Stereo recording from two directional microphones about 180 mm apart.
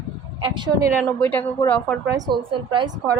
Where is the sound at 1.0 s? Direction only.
5° left (ahead or behind).